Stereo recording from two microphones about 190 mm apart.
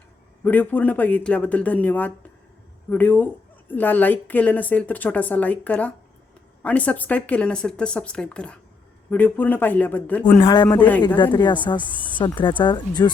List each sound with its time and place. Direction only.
0.4 s a woman's voice: 10° left (ahead or behind)
10.4 s a woman's voice: 25° left (ahead or behind)
10.7 s a woman's voice: 10° left (ahead or behind)
11.2 s a woman's voice: 25° left (ahead or behind)
11.8 s speech: 25° right (ahead or behind)
12.2 s a woman's voice: 25° left (ahead or behind)